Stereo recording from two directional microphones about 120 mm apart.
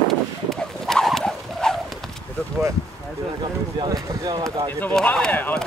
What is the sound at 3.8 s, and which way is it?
Basketball bounce, 35° right (ahead or behind).